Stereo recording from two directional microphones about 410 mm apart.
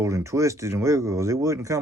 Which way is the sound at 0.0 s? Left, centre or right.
Centre.